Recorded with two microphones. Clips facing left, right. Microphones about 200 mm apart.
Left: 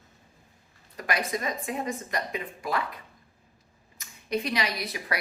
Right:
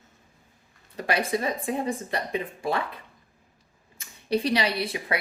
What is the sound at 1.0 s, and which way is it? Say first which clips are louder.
Speech: right 4 dB; 30° right (ahead or behind).